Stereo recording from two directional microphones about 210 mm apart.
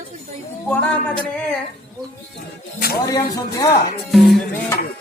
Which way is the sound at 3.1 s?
15° left (ahead or behind).